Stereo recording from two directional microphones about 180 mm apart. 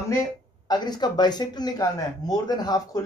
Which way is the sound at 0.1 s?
20° left (ahead or behind).